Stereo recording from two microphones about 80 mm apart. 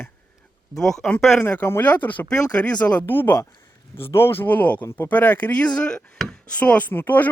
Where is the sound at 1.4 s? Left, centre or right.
Left.